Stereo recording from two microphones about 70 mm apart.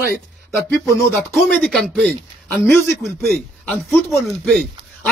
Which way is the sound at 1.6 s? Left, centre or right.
Centre.